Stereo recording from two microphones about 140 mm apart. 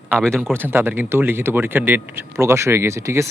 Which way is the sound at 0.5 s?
15° right (ahead or behind).